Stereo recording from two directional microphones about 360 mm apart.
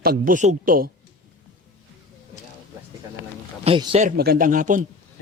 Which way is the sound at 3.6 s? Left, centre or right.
Centre.